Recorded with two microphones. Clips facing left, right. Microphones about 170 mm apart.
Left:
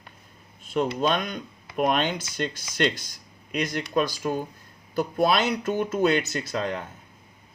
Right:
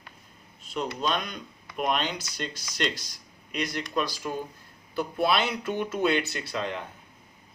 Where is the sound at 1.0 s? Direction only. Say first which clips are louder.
Left 5 dB; 50° left (ahead or behind).